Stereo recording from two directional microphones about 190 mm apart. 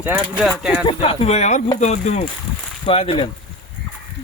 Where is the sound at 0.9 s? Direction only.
30° left (ahead or behind).